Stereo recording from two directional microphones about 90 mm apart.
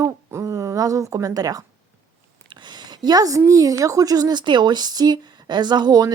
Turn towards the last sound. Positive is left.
turn(degrees=-50)  # may be behind; listen again after turning